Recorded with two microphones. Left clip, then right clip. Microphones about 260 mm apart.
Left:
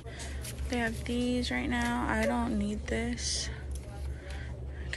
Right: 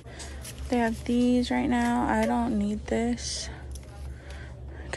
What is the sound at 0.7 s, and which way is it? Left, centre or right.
Speech, centre.